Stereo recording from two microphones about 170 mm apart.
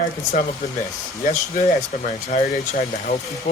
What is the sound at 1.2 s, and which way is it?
Speech, 45° left (ahead or behind).